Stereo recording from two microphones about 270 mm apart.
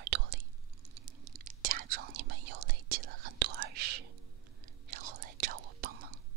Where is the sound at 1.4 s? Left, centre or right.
Right.